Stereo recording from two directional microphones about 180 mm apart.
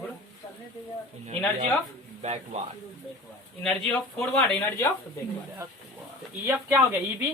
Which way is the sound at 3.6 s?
5° left (ahead or behind).